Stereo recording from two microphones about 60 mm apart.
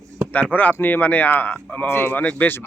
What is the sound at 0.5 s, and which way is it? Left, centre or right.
Speech, left.